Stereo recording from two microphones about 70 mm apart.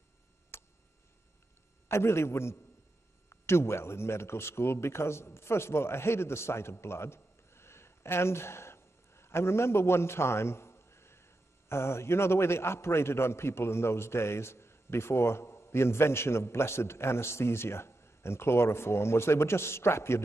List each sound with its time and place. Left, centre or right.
0.5 s tick: left
1.9 s a man's voice: left